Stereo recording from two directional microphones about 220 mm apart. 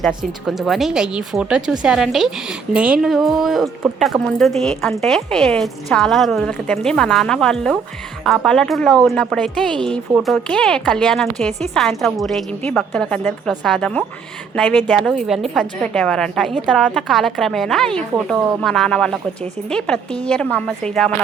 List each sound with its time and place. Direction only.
0.0 s a woman's voice: centre (ahead or behind)